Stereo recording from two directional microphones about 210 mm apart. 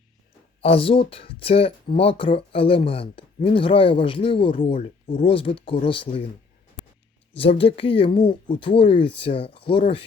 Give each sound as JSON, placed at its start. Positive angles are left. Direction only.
{"t": 0.6, "sound": "speech", "side_deg": 25}
{"t": 7.3, "sound": "speech", "side_deg": 25}